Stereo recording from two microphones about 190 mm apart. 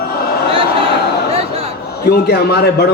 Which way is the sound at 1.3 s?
30° right (ahead or behind).